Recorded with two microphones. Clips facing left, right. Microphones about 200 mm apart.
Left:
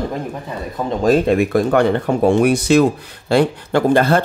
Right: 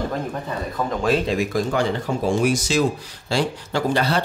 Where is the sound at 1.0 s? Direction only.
50° left (ahead or behind).